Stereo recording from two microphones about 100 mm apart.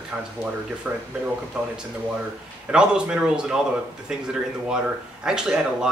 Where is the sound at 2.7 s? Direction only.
10° right (ahead or behind).